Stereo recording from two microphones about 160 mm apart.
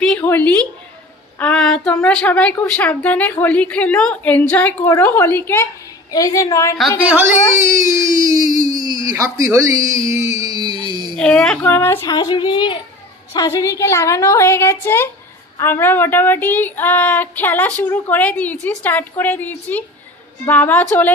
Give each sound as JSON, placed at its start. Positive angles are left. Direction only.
{"t": 0.0, "sound": "a woman's voice", "side_deg": 10}
{"t": 1.4, "sound": "child singing", "side_deg": 5}
{"t": 2.0, "sound": "a child's voice", "side_deg": 10}
{"t": 7.1, "sound": "speech", "side_deg": -15}
{"t": 11.1, "sound": "speech", "side_deg": 5}
{"t": 12.1, "sound": "a child's voice", "side_deg": 25}